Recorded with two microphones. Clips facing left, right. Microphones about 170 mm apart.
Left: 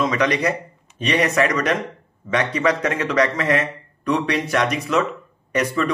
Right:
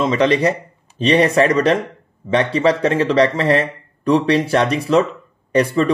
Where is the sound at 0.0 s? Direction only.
30° right (ahead or behind).